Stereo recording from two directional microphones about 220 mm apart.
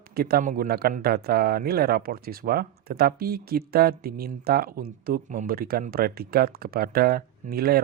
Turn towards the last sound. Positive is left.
turn(degrees=-45)  # may be behind; listen again after turning